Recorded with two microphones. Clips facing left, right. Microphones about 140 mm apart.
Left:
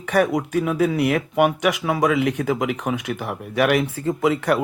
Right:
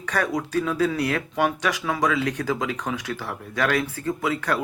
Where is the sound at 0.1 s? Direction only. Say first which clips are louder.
Left 5 dB; 20° left (ahead or behind).